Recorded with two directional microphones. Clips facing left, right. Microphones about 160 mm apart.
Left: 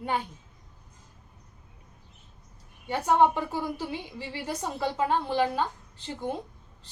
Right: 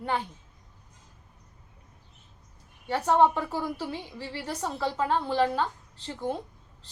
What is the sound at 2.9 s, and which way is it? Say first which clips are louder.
A woman's voice: even; 15° left (ahead or behind).